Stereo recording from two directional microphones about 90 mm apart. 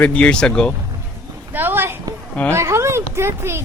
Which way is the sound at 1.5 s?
25° right (ahead or behind).